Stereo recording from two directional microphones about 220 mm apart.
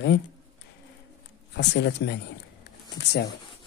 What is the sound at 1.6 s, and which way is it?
Speech, 50° left (ahead or behind).